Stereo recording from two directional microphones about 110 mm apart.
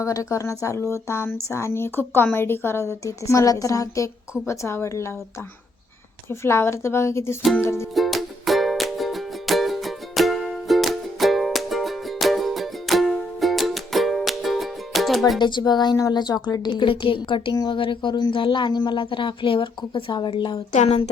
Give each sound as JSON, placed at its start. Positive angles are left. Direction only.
{"t": 0.0, "sound": "speech", "side_deg": 30}
{"t": 6.4, "sound": "speech", "side_deg": 25}
{"t": 7.9, "sound": "music", "side_deg": 0}
{"t": 15.4, "sound": "a woman's voice", "side_deg": 45}
{"t": 20.7, "sound": "speech", "side_deg": 80}